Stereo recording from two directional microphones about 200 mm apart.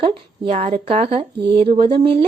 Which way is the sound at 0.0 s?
30° right (ahead or behind).